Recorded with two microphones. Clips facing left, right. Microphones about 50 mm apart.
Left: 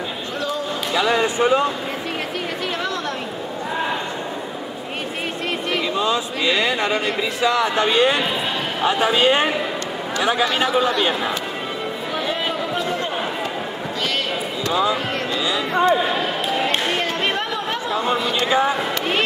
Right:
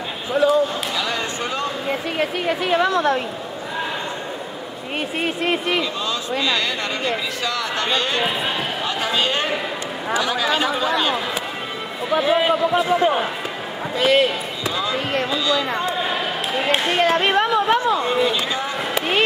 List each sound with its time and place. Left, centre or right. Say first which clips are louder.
0.3 s speech: right 11 dB; centre
0.9 s speech: left 6 dB; centre
2.1 s speech: right 4 dB; centre
5.2 s speech: right 5 dB; centre
5.9 s speech: left 3 dB; centre
10.4 s speech: left 2 dB; centre
12.1 s speech: right 8 dB; centre
14.7 s speech: left 5 dB; centre
15.9 s basketball bounce: left 4 dB; centre
18.1 s speech: right 2 dB; centre
18.5 s speech: left 7 dB; centre
18.9 s basketball bounce: right 1 dB; centre